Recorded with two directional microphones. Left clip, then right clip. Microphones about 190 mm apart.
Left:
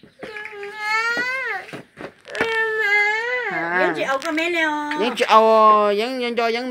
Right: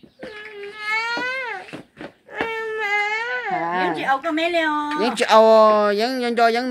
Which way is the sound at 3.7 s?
15° right (ahead or behind).